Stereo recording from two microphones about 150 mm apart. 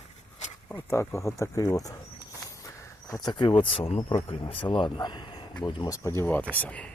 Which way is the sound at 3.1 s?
30° left (ahead or behind).